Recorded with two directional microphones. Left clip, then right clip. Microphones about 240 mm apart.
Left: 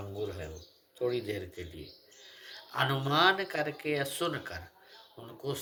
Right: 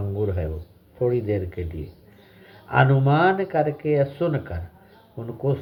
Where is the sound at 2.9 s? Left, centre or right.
Left.